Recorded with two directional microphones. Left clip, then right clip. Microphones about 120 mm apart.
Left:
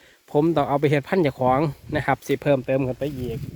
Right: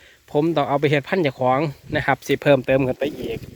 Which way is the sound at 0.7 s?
30° left (ahead or behind).